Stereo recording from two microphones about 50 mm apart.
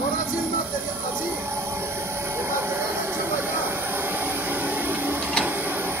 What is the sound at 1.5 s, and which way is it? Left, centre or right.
Train, right.